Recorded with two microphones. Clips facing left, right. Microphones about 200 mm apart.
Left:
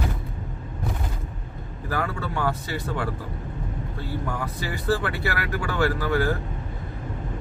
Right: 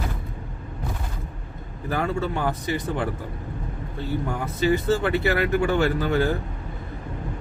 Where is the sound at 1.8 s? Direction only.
20° right (ahead or behind).